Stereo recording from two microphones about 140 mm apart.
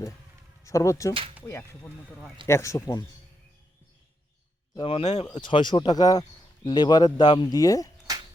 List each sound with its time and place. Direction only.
0.6 s speech: 20° left (ahead or behind)
4.8 s speech: 45° left (ahead or behind)
5.3 s speech: 35° left (ahead or behind)
8.1 s music: 25° right (ahead or behind)